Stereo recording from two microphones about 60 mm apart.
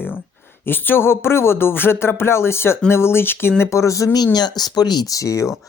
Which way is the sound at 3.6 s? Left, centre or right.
Left.